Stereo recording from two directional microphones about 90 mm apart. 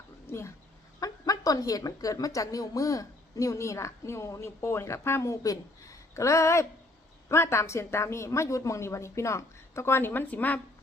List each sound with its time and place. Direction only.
0.3 s speech: 30° left (ahead or behind)
0.9 s a woman's voice: 40° left (ahead or behind); by 10.6 s 20° left (ahead or behind)